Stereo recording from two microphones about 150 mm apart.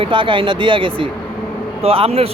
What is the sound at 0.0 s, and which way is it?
Speech, 35° right (ahead or behind).